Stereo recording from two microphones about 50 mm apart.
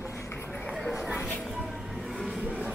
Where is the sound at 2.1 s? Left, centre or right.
Centre.